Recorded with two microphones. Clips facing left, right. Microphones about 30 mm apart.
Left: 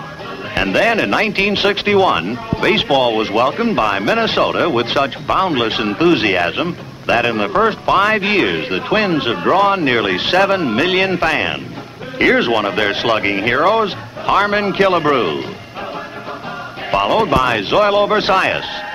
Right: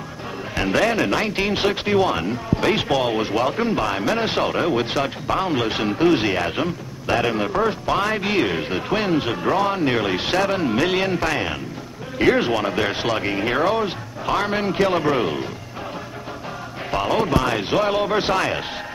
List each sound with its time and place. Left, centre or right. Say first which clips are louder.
0.6 s speech: left 5 dB; left
16.9 s speech: left 6 dB; left